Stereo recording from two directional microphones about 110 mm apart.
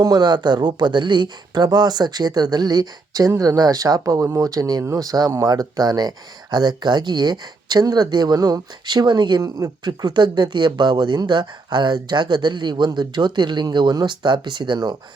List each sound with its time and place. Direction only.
0.0 s speech: 40° right (ahead or behind)
9.4 s speech: 35° right (ahead or behind)